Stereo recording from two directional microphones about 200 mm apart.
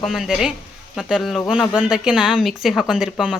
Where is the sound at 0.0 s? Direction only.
Centre (ahead or behind).